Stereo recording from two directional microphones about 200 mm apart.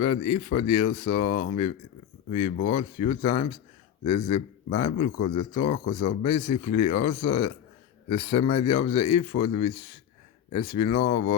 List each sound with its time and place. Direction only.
0.2 s a man's voice: 35° left (ahead or behind)